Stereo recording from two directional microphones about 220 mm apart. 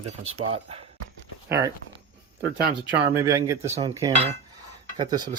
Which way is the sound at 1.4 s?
10° right (ahead or behind).